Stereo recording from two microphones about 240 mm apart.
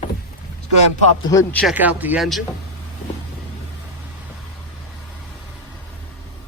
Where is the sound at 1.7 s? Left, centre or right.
Centre.